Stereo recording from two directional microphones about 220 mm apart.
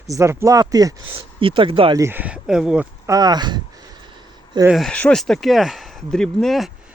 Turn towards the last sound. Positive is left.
turn(degrees=0)  # may be behind; listen again after turning